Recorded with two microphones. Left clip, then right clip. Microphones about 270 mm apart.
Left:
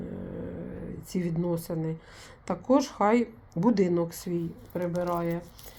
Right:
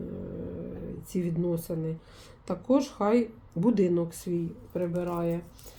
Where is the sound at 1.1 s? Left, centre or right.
Centre.